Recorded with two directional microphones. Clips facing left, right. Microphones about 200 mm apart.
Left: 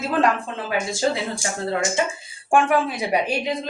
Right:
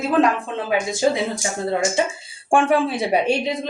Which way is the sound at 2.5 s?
30° right (ahead or behind).